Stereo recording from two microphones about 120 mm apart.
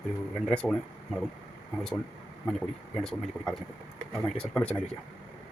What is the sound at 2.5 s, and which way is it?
Speech, 5° left (ahead or behind).